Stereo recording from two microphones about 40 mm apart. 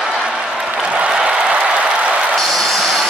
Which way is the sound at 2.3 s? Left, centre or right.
Centre.